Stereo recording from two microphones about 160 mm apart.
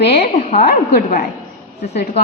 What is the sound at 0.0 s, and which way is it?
A woman's voice, 90° left.